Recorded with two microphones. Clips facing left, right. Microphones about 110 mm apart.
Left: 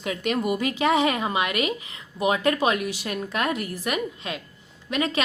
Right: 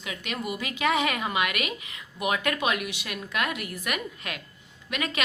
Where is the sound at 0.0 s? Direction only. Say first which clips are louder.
Left 8 dB; 40° left (ahead or behind).